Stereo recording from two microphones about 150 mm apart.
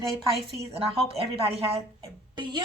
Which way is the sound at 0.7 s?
40° right (ahead or behind).